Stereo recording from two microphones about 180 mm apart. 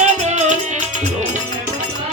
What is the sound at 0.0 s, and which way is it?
Music, 40° right (ahead or behind).